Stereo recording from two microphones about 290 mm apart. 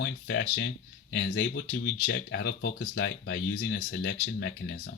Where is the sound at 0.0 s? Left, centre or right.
Left.